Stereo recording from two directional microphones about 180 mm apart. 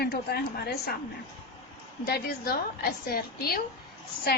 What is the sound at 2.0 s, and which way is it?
A woman's voice, 60° left (ahead or behind).